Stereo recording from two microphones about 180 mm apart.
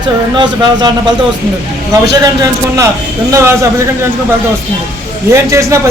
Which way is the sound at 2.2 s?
20° right (ahead or behind).